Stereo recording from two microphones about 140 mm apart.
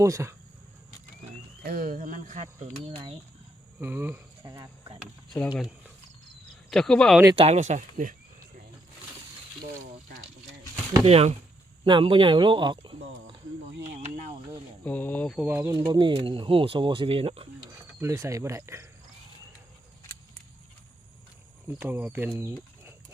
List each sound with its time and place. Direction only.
0.0 s cricket: 20° right (ahead or behind)
1.6 s speech: 90° right; by 2.5 s 60° right (ahead or behind)
2.8 s speech: 40° right (ahead or behind)
3.8 s speech: 15° right (ahead or behind)
4.4 s cricket: 25° right (ahead or behind)
6.7 s speech: 5° left (ahead or behind)
7.3 s speech: 50° right (ahead or behind); by 8.1 s 65° right (ahead or behind)
11.0 s speech: 45° right (ahead or behind)
13.8 s a sound: 55° right (ahead or behind)
14.8 s speech: 10° left (ahead or behind)
15.4 s cricket: 20° right (ahead or behind)
15.8 s speech: 35° right (ahead or behind)
18.0 s cricket: 20° right (ahead or behind)
21.8 s speech: 10° right (ahead or behind)